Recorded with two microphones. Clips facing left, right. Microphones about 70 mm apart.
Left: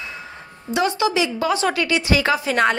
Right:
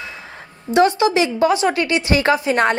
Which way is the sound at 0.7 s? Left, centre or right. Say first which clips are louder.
Right 5 dB; right.